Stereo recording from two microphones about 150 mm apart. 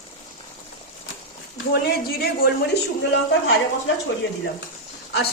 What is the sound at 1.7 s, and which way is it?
Speech, 90° left.